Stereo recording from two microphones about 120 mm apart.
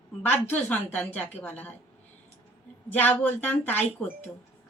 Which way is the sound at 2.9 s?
15° left (ahead or behind).